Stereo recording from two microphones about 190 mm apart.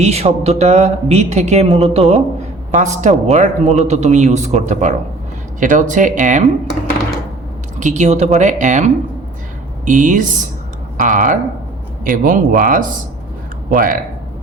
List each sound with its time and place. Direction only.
0.0 s speech: 35° right (ahead or behind)
7.8 s speech: 40° right (ahead or behind)